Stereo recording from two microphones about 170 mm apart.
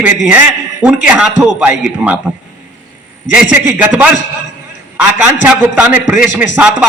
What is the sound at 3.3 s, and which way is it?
Speech, 5° right (ahead or behind).